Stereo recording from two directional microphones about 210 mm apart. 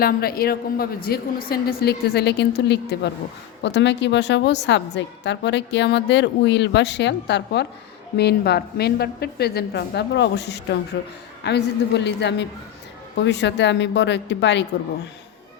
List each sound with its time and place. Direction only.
0.0 s a woman's voice: 45° left (ahead or behind)